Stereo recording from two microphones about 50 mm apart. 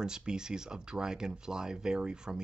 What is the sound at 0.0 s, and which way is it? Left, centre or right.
Speech, centre.